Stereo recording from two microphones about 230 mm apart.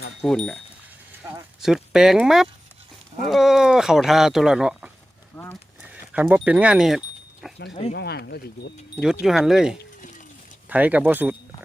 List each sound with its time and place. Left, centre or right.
0.2 s speech: centre
5.8 s speech: centre
7.4 s a sound: centre
7.9 s speech: left
9.2 s speech: centre